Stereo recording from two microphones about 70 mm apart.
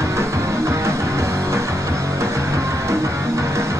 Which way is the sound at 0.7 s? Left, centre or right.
Right.